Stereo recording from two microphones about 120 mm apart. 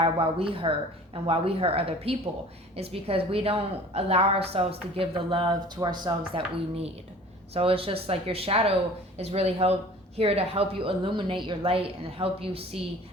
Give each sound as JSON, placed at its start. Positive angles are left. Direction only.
{"t": 0.0, "sound": "a woman's voice", "side_deg": -50}
{"t": 7.5, "sound": "a woman's voice", "side_deg": -50}